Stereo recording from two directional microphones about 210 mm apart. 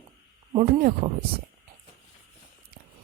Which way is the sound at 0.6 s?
40° right (ahead or behind).